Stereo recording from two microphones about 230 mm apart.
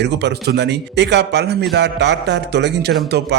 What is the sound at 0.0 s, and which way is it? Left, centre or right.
Speech, right.